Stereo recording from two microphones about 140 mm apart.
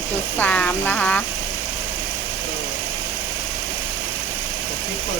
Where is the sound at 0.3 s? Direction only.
10° left (ahead or behind).